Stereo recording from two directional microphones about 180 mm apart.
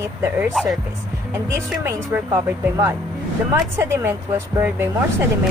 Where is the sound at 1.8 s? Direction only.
15° right (ahead or behind).